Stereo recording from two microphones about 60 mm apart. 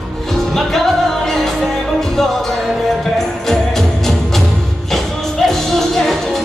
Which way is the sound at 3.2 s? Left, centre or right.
Centre.